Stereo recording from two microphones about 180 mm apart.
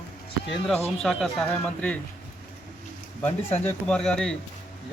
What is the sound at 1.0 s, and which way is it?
Speech, 5° left (ahead or behind).